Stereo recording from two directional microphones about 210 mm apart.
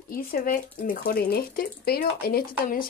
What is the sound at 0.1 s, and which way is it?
Speech, 45° left (ahead or behind).